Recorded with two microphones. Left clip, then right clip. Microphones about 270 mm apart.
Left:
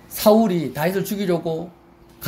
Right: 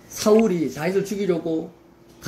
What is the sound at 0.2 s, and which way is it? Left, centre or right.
Speech, left.